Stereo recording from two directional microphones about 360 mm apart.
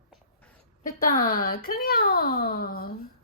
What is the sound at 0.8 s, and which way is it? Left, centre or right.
A child's voice, left.